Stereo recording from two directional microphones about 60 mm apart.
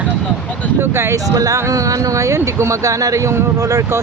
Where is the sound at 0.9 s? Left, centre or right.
Right.